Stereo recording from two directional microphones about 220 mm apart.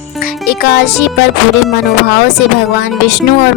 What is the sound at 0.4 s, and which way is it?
Speech, 45° left (ahead or behind).